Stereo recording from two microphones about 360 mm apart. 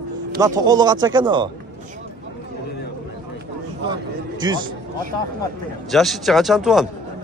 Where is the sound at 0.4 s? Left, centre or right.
Centre.